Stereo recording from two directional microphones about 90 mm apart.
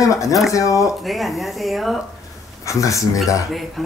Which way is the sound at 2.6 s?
35° left (ahead or behind).